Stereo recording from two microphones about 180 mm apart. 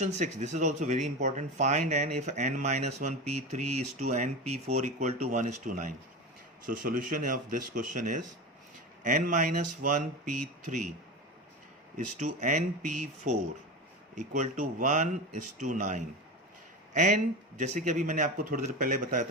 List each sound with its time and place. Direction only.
0.0 s speech: 40° right (ahead or behind)
11.9 s speech: 45° right (ahead or behind)